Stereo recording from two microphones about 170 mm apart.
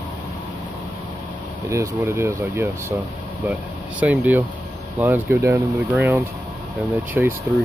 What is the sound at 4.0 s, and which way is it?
Speech, 10° right (ahead or behind).